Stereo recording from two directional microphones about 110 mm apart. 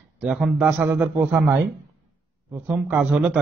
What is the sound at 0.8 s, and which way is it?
A man's voice, 20° right (ahead or behind).